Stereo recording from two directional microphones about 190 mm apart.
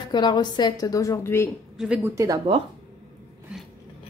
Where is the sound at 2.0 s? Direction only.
15° right (ahead or behind).